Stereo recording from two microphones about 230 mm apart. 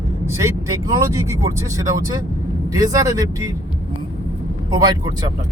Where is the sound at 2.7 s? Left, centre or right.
Centre.